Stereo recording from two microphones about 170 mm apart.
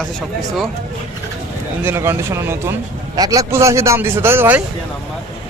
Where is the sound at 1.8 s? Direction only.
15° right (ahead or behind).